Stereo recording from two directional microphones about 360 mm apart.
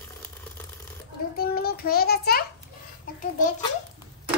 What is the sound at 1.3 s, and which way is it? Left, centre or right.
A child's voice, left.